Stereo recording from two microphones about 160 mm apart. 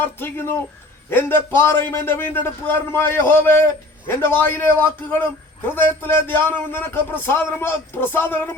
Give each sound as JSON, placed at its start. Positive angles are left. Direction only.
{"t": 0.0, "sound": "a man's voice", "side_deg": 15}